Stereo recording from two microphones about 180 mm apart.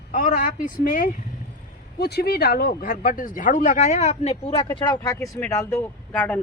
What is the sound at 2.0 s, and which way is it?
Speech, 60° left (ahead or behind).